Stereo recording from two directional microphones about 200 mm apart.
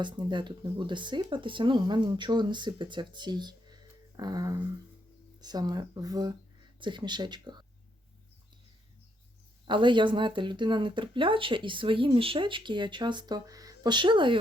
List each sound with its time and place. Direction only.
0.0 s speech: 25° right (ahead or behind)
9.6 s speech: 25° right (ahead or behind)